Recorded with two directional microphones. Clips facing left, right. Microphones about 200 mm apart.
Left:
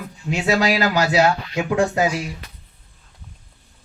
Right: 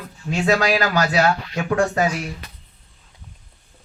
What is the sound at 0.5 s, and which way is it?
Speech, 20° left (ahead or behind).